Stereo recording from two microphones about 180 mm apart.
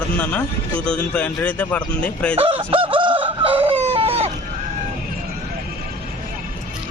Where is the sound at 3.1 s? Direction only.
10° right (ahead or behind).